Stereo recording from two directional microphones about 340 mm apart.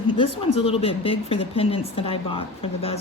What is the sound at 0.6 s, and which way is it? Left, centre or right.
Speech, centre.